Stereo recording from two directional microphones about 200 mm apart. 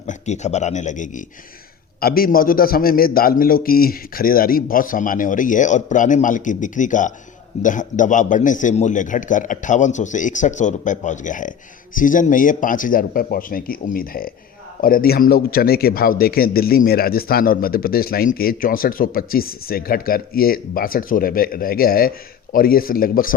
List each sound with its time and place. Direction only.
0.1 s a man's voice: 35° left (ahead or behind)